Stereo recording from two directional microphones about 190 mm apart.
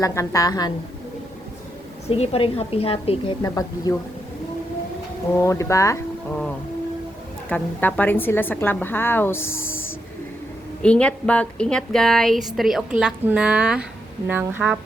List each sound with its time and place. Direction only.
0.0 s a woman's voice: 15° left (ahead or behind)
2.0 s a woman's voice: 30° left (ahead or behind)
3.4 s a woman's voice: 20° left (ahead or behind)
5.4 s a woman's voice: 15° left (ahead or behind)
7.5 s a woman's voice: 10° left (ahead or behind)
10.8 s a woman's voice: 5° left (ahead or behind)